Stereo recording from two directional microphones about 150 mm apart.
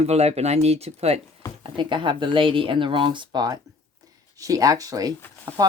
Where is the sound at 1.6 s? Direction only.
30° right (ahead or behind).